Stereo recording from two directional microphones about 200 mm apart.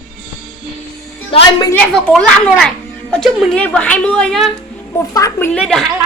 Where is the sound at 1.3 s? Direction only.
20° left (ahead or behind).